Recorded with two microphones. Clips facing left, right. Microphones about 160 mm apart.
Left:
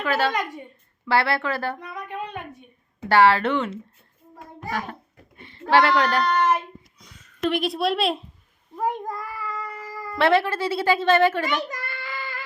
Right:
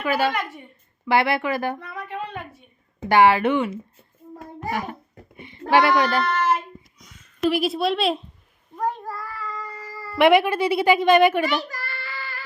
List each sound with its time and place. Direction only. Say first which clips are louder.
0.0 s a woman's voice: right 1 dB; 10° right (ahead or behind)
1.8 s a sound: right 1 dB; 15° left (ahead or behind)
3.1 s a woman's voice: right 1 dB; 15° right (ahead or behind)
5.4 s speech: even; 15° right (ahead or behind)
6.3 s child singing: left 1 dB; 15° left (ahead or behind)
7.4 s speech: right 2 dB; 5° right (ahead or behind)
8.9 s cat: left 1 dB; 15° left (ahead or behind)
10.2 s a woman's voice: right 4 dB; 15° right (ahead or behind)
11.4 s a sound: right 2 dB; 20° left (ahead or behind)